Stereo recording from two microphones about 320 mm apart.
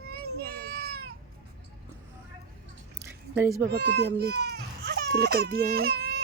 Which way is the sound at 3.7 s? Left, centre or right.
Right.